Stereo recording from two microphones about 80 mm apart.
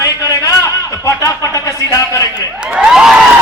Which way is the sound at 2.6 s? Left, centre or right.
Centre.